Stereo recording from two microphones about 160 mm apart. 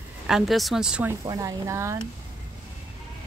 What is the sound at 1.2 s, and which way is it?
Speech, 20° right (ahead or behind).